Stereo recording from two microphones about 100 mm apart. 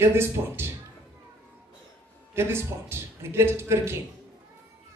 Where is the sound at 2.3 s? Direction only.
25° right (ahead or behind).